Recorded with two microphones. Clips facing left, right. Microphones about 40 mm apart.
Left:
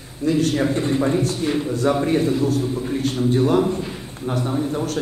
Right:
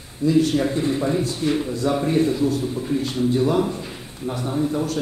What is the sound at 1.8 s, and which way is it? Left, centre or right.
Speech, left.